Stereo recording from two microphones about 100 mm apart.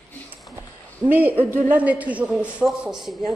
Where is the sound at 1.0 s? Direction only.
15° right (ahead or behind).